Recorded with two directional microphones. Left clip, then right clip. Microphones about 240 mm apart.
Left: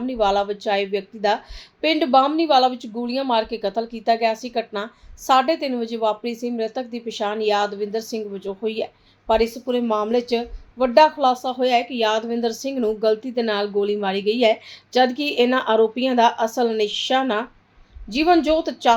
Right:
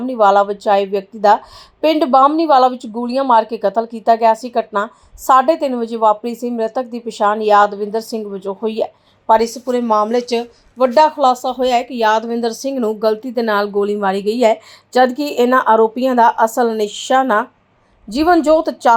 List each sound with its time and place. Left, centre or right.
0.0 s speech: right